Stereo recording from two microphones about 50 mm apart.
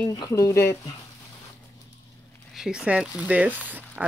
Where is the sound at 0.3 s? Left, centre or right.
Left.